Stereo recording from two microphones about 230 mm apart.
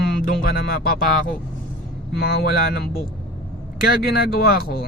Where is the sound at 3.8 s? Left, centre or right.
Left.